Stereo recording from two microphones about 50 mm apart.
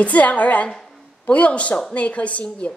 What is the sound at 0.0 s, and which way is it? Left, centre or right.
A woman's voice, left.